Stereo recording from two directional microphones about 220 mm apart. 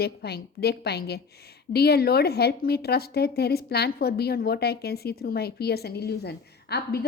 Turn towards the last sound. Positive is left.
turn(degrees=45)  # may be behind; listen again after turning